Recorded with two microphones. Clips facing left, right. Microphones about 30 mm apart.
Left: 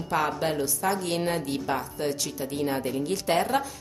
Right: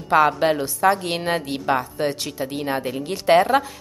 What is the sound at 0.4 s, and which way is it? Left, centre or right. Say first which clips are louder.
A woman's voice: right 8 dB; right.